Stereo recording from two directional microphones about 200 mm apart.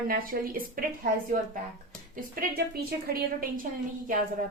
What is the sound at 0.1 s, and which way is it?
A woman's voice, 45° right (ahead or behind).